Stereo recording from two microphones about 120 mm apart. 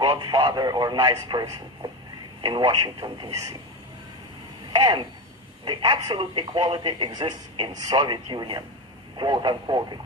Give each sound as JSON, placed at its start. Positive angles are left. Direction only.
{"t": 0.0, "sound": "speech", "side_deg": -35}
{"t": 4.7, "sound": "speech", "side_deg": -35}